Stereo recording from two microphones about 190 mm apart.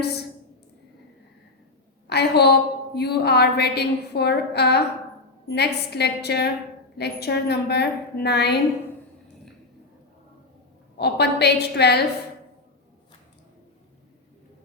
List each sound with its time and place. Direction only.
2.0 s a woman's voice: 60° left (ahead or behind)
10.9 s a woman's voice: 60° left (ahead or behind)